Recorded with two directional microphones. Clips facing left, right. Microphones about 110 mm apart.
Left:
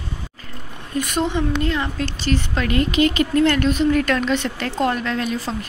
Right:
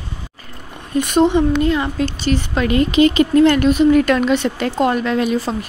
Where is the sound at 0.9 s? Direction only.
20° right (ahead or behind).